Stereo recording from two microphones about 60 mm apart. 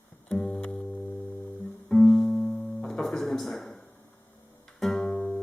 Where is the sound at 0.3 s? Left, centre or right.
Centre.